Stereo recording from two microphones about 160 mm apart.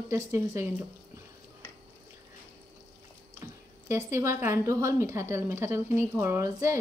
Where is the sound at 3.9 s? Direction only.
15° right (ahead or behind).